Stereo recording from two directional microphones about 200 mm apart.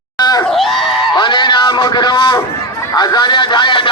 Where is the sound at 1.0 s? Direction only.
25° left (ahead or behind).